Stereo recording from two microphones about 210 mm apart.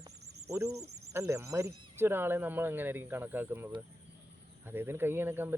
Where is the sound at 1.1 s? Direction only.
15° right (ahead or behind).